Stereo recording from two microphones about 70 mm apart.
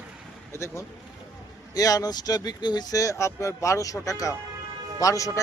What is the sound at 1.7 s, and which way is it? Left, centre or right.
A man's voice, left.